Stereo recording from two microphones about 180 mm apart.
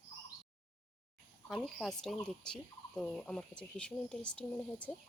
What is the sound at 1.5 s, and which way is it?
Speech, centre (ahead or behind).